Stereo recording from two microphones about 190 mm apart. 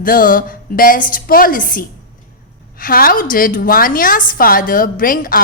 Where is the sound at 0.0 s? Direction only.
50° left (ahead or behind).